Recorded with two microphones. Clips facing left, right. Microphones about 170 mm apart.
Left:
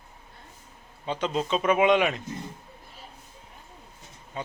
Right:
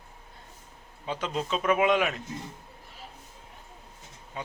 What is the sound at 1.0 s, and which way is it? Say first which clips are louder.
Speech: left 3 dB; 5° right (ahead or behind).